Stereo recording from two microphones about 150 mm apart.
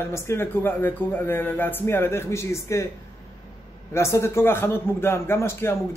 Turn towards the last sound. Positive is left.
turn(degrees=15)  # may be behind; listen again after turning